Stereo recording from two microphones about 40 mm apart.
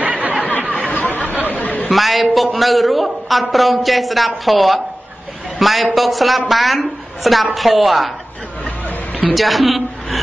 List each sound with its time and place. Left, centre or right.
0.0 s a sound: right
0.4 s chatter: left
0.9 s a sound: left
1.5 s chatter: left
1.9 s a man's voice: centre
9.3 s a woman's voice: centre